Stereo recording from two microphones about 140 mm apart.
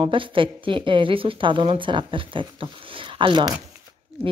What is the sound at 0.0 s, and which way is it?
Speech, 35° right (ahead or behind).